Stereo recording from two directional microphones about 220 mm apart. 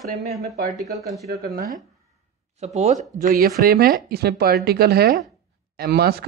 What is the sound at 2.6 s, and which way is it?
Speech, 30° right (ahead or behind).